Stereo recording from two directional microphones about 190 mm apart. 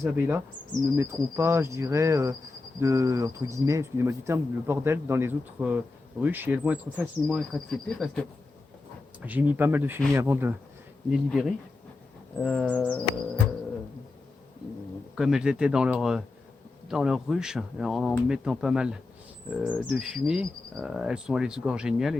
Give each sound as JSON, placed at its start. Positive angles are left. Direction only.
{"t": 0.0, "sound": "speech", "side_deg": -10}
{"t": 9.2, "sound": "speech", "side_deg": -10}
{"t": 15.1, "sound": "speech", "side_deg": -5}